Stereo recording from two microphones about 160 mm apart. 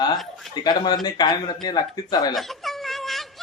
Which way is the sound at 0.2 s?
Centre (ahead or behind).